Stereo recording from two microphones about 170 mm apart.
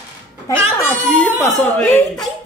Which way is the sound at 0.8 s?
5° left (ahead or behind).